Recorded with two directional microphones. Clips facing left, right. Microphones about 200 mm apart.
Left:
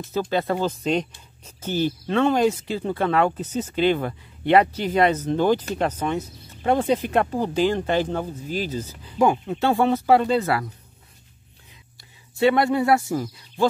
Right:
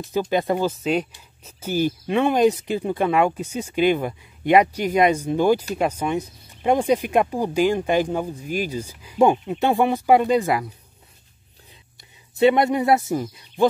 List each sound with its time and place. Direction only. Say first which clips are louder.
0.0 s speech: right 2 dB; 15° right (ahead or behind)
12.4 s speech: right 2 dB; 20° right (ahead or behind)